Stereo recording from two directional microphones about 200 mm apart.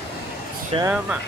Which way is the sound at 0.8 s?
10° right (ahead or behind).